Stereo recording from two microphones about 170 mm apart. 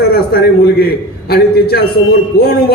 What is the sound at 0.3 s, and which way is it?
A man's voice, 65° left (ahead or behind).